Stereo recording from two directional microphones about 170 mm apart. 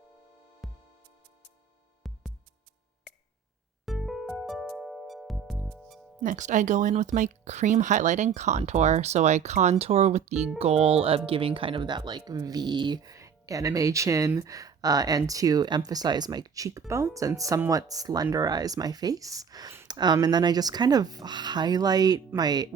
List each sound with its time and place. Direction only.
0.6 s music: centre (ahead or behind)
2.0 s music: centre (ahead or behind)
3.8 s music: centre (ahead or behind)
6.1 s speech: 45° right (ahead or behind); by 22.7 s 25° right (ahead or behind)